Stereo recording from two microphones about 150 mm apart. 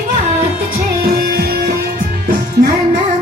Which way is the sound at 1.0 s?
90° right.